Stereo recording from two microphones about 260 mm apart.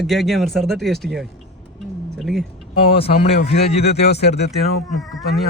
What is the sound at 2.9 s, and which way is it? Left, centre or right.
Speech, left.